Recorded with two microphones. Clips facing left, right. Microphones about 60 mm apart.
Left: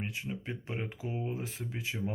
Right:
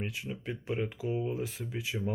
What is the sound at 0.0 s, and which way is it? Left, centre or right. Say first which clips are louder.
Speech: right 1 dB; left.